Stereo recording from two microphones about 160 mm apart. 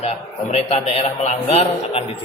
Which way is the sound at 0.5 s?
40° left (ahead or behind).